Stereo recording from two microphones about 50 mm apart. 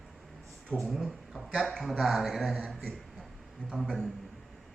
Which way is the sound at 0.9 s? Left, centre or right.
Centre.